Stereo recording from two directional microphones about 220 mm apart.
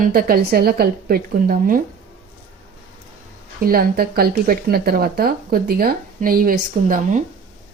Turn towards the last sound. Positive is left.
turn(degrees=-40)  # may be behind; listen again after turning